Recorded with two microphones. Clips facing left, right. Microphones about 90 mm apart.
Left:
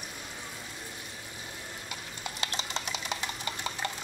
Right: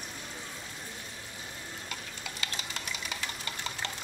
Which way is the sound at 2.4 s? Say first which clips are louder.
Left 4 dB; 25° left (ahead or behind).